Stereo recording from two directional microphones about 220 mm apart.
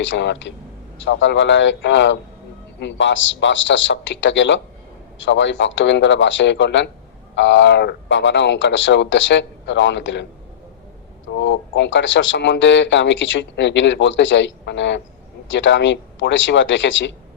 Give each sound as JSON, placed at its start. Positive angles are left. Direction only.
{"t": 0.0, "sound": "speech", "side_deg": 55}
{"t": 11.3, "sound": "speech", "side_deg": 55}